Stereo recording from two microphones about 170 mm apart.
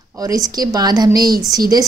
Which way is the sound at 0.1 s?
20° right (ahead or behind).